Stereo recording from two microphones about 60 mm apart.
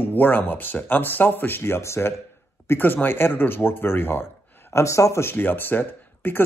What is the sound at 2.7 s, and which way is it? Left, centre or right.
Speech, left.